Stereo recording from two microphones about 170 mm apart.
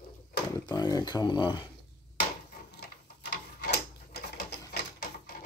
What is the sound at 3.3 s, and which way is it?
Printer, 65° left (ahead or behind).